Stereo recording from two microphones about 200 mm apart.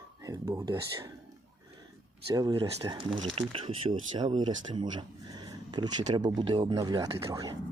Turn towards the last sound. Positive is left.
turn(degrees=-15)  # may be behind; listen again after turning